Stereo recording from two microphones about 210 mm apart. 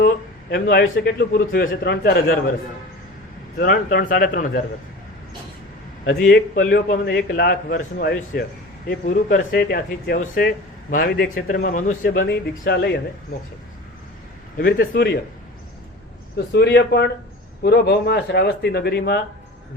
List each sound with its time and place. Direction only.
0.5 s a man's voice: 50° left (ahead or behind)
3.6 s a man's voice: 45° left (ahead or behind)
6.2 s a man's voice: 40° left (ahead or behind)
12.2 s a man's voice: 50° left (ahead or behind)
14.6 s a man's voice: 50° left (ahead or behind)
16.5 s a man's voice: 50° left (ahead or behind)